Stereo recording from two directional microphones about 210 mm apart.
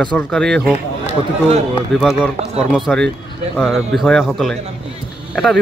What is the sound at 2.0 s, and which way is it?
Speech, centre (ahead or behind).